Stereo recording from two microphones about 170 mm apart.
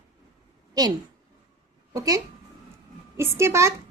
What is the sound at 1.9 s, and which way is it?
A woman's voice, 20° right (ahead or behind).